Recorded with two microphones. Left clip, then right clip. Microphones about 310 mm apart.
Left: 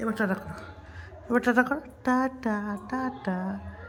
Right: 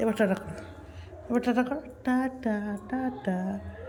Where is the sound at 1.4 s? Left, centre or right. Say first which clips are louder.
Left 4 dB; centre.